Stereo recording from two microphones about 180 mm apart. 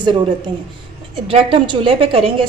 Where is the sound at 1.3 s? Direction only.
30° right (ahead or behind).